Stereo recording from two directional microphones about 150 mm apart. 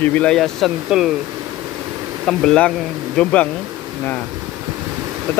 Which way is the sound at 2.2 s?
5° left (ahead or behind).